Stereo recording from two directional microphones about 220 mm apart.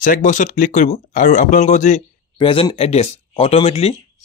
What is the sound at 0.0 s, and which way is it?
Speech, 35° left (ahead or behind).